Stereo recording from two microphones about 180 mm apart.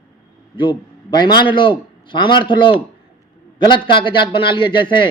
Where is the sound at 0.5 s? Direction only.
25° left (ahead or behind).